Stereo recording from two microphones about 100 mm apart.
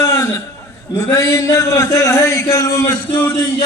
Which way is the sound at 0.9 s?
30° left (ahead or behind).